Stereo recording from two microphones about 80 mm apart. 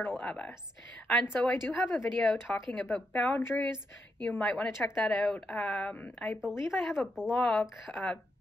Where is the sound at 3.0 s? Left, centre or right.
Centre.